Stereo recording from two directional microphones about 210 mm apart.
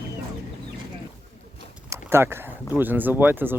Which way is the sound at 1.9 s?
10° right (ahead or behind).